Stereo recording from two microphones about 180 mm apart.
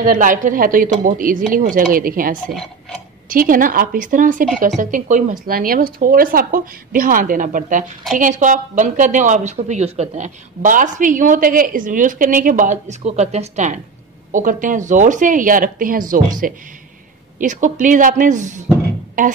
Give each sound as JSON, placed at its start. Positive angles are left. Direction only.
{"t": 0.0, "sound": "a woman's voice", "side_deg": -45}